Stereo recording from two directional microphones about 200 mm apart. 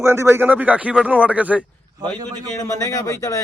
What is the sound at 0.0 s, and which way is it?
Speech, 15° right (ahead or behind).